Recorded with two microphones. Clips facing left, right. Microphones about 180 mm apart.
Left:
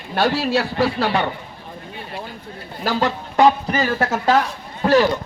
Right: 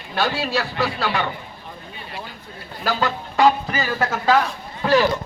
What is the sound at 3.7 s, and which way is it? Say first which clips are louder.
Speech: left 3 dB; 25° left (ahead or behind).